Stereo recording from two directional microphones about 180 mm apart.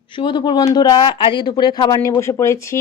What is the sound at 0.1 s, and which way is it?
Speech, 25° left (ahead or behind).